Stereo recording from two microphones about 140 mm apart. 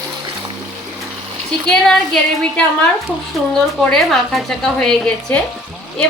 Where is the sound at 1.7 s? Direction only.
5° left (ahead or behind).